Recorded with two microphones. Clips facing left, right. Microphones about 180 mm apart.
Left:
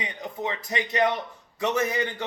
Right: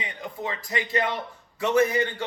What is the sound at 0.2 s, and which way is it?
A man's voice, 20° left (ahead or behind).